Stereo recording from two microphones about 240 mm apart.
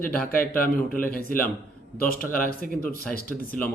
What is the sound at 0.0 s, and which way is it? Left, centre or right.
Speech, left.